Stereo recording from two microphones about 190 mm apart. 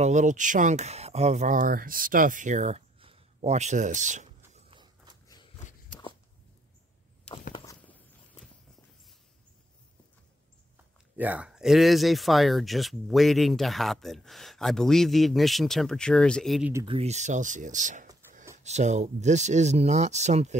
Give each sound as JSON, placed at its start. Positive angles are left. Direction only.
{"t": 0.0, "sound": "speech", "side_deg": -40}
{"t": 4.6, "sound": "a sound", "side_deg": -25}
{"t": 11.1, "sound": "speech", "side_deg": -5}
{"t": 16.8, "sound": "speech", "side_deg": -30}